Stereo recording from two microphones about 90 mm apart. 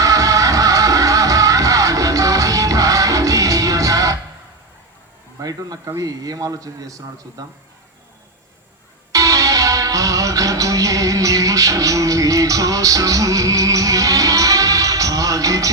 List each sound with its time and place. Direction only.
0.0 s music: 40° right (ahead or behind)
5.4 s a man's voice: 45° right (ahead or behind)
9.1 s music: 40° right (ahead or behind)